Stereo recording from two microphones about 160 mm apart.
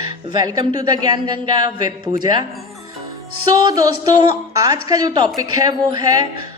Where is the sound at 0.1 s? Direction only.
25° right (ahead or behind).